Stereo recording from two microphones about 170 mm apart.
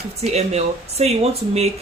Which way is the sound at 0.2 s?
40° right (ahead or behind).